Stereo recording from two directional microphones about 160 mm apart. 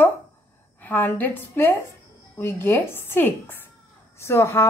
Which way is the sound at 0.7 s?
10° left (ahead or behind).